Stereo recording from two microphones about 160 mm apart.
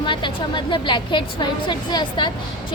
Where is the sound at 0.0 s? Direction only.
30° left (ahead or behind).